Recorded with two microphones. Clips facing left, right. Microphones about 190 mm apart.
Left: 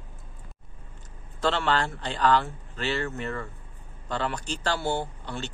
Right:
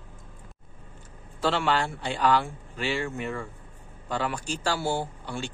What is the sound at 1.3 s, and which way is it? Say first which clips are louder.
A man's voice: even; 10° right (ahead or behind).